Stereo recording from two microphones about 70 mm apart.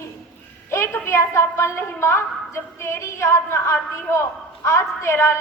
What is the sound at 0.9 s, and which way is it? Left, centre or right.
A woman's voice, left.